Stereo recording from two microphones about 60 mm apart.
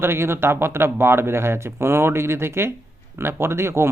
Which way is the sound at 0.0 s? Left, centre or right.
Right.